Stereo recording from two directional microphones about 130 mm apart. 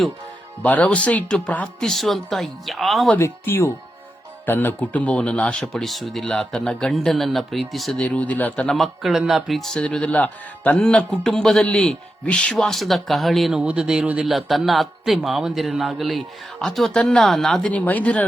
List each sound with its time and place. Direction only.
0.6 s speech: 10° left (ahead or behind)
3.1 s speech: 20° left (ahead or behind); by 8.0 s centre (ahead or behind)
8.0 s speech: 10° left (ahead or behind)